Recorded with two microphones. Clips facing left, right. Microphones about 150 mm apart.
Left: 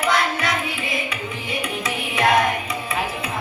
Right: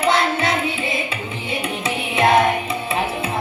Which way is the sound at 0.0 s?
25° right (ahead or behind).